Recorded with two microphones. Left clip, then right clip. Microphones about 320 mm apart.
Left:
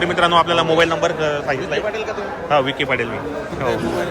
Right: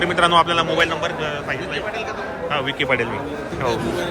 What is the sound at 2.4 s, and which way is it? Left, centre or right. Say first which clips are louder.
Speech: left 3 dB; centre.